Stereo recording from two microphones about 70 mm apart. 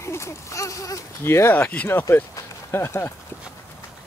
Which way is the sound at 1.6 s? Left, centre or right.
Left.